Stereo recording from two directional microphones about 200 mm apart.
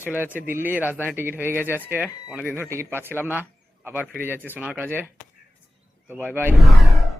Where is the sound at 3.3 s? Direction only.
10° right (ahead or behind).